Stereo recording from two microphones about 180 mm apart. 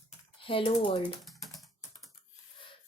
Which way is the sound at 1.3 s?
Centre (ahead or behind).